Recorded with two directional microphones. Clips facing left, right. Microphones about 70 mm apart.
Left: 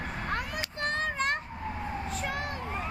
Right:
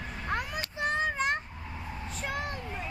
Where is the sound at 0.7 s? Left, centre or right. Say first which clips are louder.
Right 2 dB; centre.